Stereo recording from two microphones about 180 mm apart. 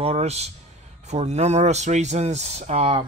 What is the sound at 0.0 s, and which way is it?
Speech, 35° right (ahead or behind).